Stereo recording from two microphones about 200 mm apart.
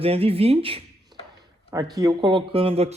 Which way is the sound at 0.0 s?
30° right (ahead or behind).